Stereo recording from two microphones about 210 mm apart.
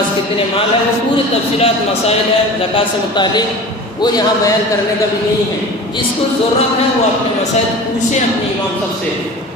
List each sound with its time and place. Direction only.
1.1 s a man's voice: 30° left (ahead or behind)